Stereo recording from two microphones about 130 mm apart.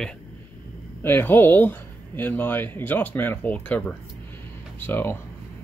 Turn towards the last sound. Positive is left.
turn(degrees=15)  # may be behind; listen again after turning